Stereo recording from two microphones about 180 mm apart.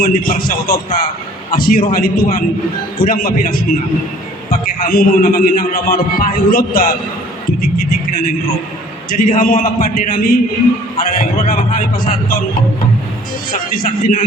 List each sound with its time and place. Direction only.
0.0 s a man's voice: 55° left (ahead or behind)
4.8 s a man's voice: 55° left (ahead or behind)
7.6 s music: 55° left (ahead or behind)
9.1 s a man's voice: 50° left (ahead or behind)
13.5 s a man's voice: 55° left (ahead or behind)